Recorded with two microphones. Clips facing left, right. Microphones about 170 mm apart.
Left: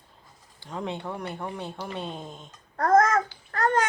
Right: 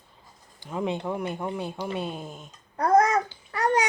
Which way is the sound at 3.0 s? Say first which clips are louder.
Even; 15° right (ahead or behind).